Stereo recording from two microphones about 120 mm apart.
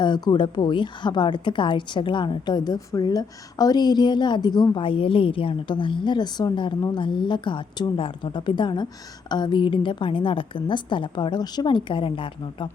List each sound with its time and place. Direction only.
0.0 s a woman's voice: 40° left (ahead or behind)